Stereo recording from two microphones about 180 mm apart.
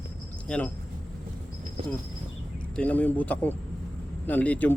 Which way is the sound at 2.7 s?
5° left (ahead or behind).